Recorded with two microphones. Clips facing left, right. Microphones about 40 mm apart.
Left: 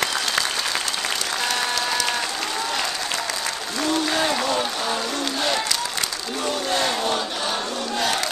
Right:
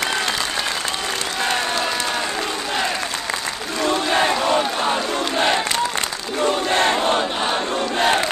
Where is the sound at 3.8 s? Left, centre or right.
Right.